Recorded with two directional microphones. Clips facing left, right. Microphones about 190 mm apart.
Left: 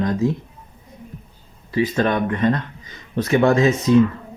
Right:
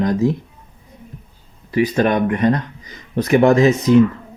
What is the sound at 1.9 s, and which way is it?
Speech, 20° right (ahead or behind).